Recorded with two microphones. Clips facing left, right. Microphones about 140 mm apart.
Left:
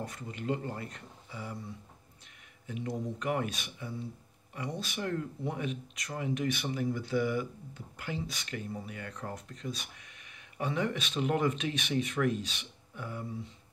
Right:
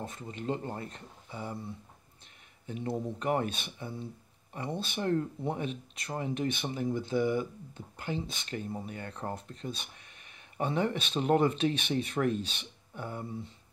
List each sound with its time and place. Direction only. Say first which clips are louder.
0.0 s speech: right 1 dB; 25° right (ahead or behind)
2.6 s speech: right 2 dB; 30° right (ahead or behind)